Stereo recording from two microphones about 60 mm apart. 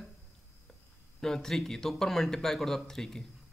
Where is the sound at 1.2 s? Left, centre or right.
Centre.